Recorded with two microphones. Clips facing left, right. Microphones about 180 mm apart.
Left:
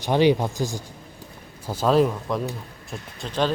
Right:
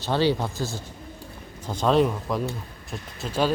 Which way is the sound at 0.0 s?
15° left (ahead or behind).